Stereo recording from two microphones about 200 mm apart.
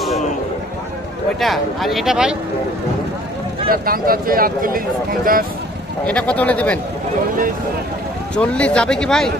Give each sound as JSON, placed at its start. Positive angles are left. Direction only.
{"t": 1.4, "sound": "speech", "side_deg": 0}
{"t": 3.6, "sound": "speech", "side_deg": -45}
{"t": 6.0, "sound": "speech", "side_deg": 5}
{"t": 8.4, "sound": "speech", "side_deg": 5}